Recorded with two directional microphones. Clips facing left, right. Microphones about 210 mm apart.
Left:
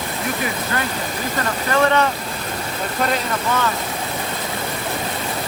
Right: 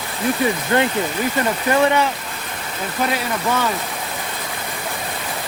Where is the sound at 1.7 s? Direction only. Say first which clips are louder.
Even; 15° right (ahead or behind).